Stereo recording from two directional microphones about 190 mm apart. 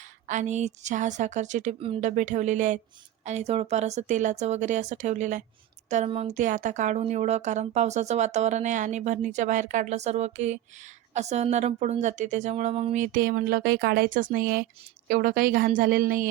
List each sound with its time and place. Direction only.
0.3 s speech: 40° right (ahead or behind)